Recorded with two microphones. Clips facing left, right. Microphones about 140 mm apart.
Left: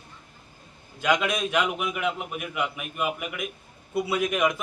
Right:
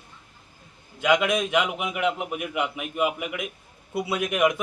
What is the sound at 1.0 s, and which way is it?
A man's voice, 15° right (ahead or behind).